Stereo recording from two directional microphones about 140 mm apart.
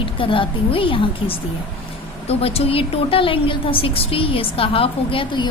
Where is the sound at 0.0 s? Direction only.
40° left (ahead or behind).